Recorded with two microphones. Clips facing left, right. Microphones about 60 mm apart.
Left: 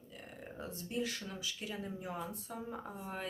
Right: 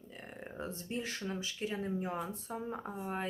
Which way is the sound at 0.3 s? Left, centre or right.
Right.